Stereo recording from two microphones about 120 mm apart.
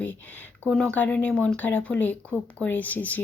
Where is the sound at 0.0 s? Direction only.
15° left (ahead or behind).